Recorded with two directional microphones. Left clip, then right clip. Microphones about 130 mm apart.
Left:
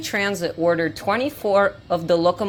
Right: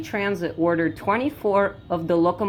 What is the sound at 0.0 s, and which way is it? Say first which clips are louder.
Speech: left 2 dB; 55° left (ahead or behind).